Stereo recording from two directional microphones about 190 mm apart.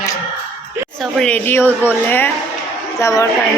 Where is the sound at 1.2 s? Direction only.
10° left (ahead or behind).